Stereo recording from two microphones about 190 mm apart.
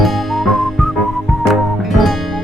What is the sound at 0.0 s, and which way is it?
Music, centre (ahead or behind).